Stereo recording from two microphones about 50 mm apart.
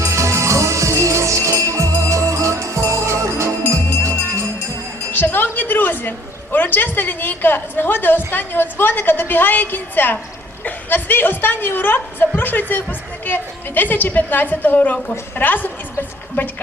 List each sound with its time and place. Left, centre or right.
0.0 s music: right
4.0 s music: right
5.1 s a woman's voice: left